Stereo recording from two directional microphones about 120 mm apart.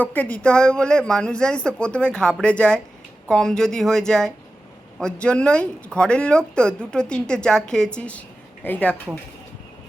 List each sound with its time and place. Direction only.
0.0 s speech: 15° left (ahead or behind)